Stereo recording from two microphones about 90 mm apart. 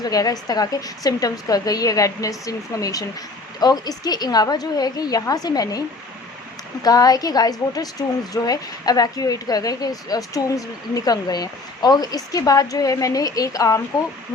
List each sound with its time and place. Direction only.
0.0 s a woman's voice: 45° left (ahead or behind)
6.8 s a woman's voice: 45° left (ahead or behind)